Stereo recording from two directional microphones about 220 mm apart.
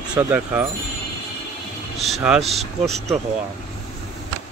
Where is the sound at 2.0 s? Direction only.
5° right (ahead or behind).